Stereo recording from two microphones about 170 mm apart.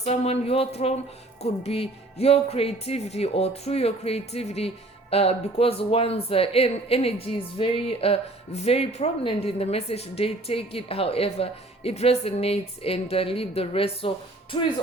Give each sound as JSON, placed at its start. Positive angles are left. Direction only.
{"t": 0.0, "sound": "speech", "side_deg": 40}